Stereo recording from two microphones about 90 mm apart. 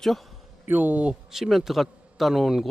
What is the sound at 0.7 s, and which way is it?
Speech, 20° right (ahead or behind).